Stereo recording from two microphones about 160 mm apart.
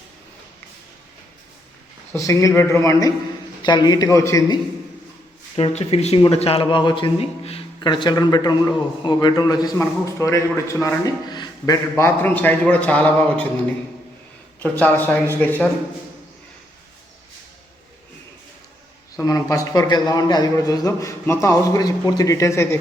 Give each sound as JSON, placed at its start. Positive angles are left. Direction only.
{"t": 2.1, "sound": "a man's voice", "side_deg": 20}
{"t": 5.5, "sound": "a man's voice", "side_deg": 40}
{"t": 14.6, "sound": "speech", "side_deg": 10}
{"t": 19.2, "sound": "a man's voice", "side_deg": 20}